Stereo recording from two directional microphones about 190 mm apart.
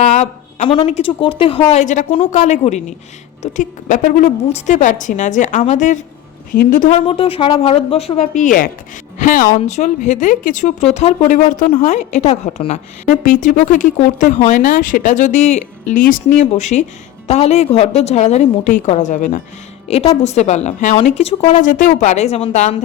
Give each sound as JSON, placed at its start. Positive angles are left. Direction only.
{"t": 0.2, "sound": "a sound", "side_deg": 40}
{"t": 0.9, "sound": "a woman's voice", "side_deg": 30}
{"t": 7.0, "sound": "a woman's voice", "side_deg": 30}